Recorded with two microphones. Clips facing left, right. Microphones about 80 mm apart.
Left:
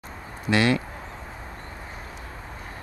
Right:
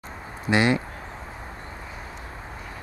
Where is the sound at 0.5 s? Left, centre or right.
Right.